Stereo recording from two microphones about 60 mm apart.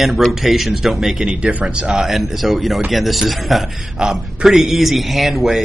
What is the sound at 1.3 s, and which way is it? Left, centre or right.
Speech, centre.